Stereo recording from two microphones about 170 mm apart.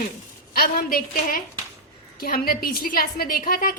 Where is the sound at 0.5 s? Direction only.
60° left (ahead or behind).